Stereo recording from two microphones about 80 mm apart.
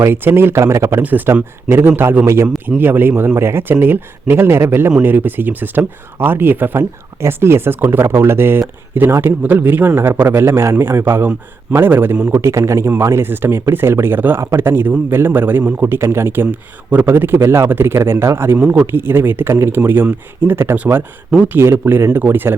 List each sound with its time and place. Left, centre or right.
0.0 s speech: right
1.0 s speech: right